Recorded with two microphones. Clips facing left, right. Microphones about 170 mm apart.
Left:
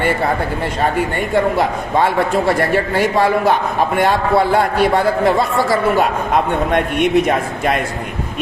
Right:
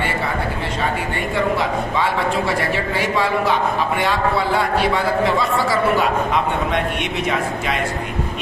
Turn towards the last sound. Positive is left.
turn(degrees=50)  # may be behind; listen again after turning